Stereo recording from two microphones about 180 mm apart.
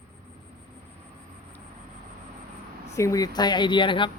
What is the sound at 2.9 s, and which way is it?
Speech, 15° left (ahead or behind).